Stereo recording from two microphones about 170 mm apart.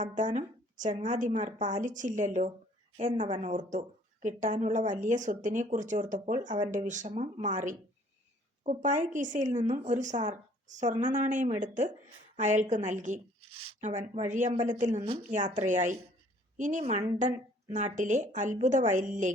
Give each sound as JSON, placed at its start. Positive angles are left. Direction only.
{"t": 0.0, "sound": "a woman's voice", "side_deg": -45}
{"t": 3.2, "sound": "a woman's voice", "side_deg": -30}
{"t": 3.7, "sound": "a woman's voice", "side_deg": -45}
{"t": 14.9, "sound": "a woman's voice", "side_deg": -30}
{"t": 15.3, "sound": "a woman's voice", "side_deg": -45}